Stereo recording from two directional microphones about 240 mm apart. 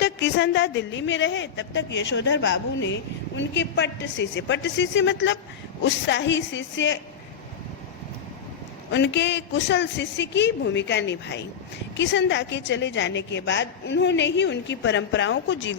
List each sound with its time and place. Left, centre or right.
0.0 s a woman's voice: left
8.9 s a woman's voice: left